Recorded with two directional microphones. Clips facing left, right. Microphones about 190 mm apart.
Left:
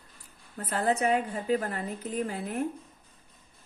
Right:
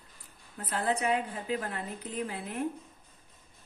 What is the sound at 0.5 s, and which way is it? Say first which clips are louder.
A woman's voice: left 3 dB; 45° left (ahead or behind).